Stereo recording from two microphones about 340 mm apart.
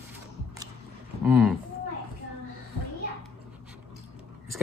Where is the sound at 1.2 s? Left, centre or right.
Centre.